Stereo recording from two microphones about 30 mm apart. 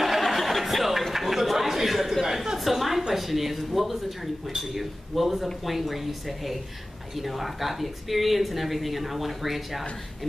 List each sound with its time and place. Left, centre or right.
0.3 s chuckle: centre
2.5 s a sound: centre
3.2 s speech: centre